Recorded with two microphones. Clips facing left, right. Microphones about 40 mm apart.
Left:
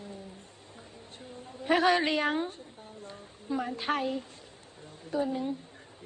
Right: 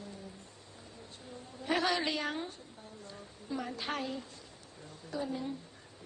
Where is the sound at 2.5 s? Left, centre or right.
Left.